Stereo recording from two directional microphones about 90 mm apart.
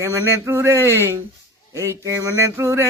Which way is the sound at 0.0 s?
35° right (ahead or behind).